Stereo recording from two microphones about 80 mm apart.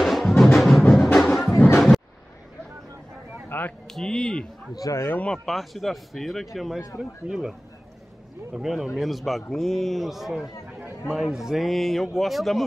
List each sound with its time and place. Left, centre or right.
0.0 s music: centre
3.4 s a sound: left
3.8 s speech: centre
4.7 s speech: left
5.2 s a man's voice: centre
8.5 s a man's voice: centre